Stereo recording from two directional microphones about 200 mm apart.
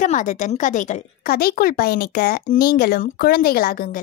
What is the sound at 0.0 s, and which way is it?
Speech, 40° left (ahead or behind).